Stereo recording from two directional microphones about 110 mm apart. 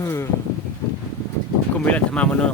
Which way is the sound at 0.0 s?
25° left (ahead or behind).